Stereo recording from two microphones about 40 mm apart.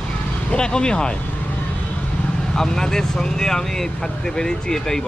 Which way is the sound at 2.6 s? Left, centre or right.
Centre.